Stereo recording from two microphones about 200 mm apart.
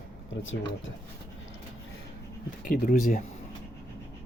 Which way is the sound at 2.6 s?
45° left (ahead or behind).